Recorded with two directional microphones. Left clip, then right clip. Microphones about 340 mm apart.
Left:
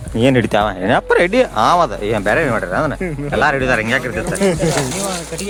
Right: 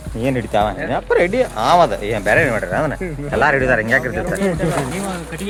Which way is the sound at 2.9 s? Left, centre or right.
Left.